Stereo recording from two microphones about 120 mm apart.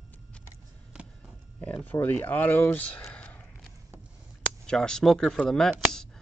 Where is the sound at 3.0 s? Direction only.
15° left (ahead or behind).